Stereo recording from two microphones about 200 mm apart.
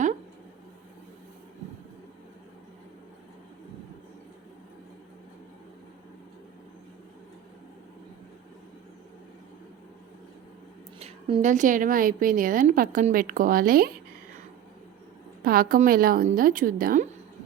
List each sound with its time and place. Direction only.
11.0 s a woman's voice: 30° right (ahead or behind); by 13.9 s 45° right (ahead or behind)
15.4 s a woman's voice: 45° right (ahead or behind)